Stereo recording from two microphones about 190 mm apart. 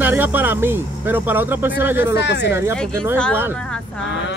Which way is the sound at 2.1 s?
65° left (ahead or behind).